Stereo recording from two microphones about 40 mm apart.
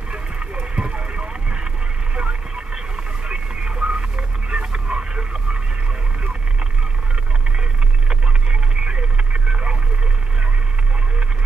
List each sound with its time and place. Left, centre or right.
0.1 s vehicle: right
3.3 s a sound: right
8.1 s radio: right